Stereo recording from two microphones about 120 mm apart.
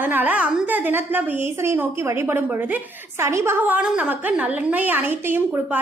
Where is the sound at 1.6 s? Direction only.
20° right (ahead or behind).